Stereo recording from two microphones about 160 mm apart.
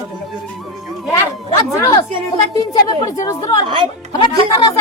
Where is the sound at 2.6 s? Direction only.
20° left (ahead or behind).